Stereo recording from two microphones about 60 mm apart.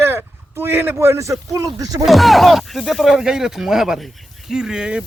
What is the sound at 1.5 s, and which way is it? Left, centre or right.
Speech, right.